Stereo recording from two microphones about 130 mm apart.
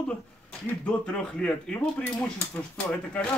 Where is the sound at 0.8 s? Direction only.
10° left (ahead or behind).